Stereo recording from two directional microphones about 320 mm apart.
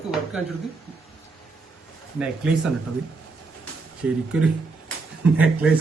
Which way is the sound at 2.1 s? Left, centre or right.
Centre.